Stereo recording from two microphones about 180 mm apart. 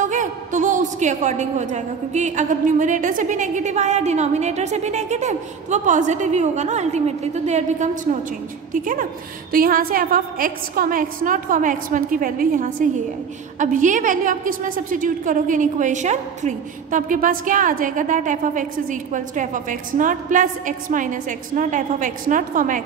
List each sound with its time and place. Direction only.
0.0 s a woman's voice: 45° right (ahead or behind)